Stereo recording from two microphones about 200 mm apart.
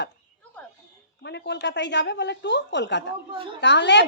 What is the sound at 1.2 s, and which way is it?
A woman's voice, 60° left (ahead or behind).